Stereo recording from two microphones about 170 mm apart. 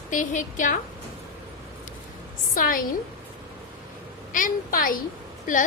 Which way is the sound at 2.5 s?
55° left (ahead or behind).